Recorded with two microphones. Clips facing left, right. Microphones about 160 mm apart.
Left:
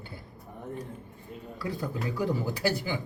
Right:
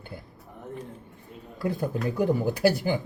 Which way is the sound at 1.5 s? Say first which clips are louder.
Right 6 dB; 55° right (ahead or behind).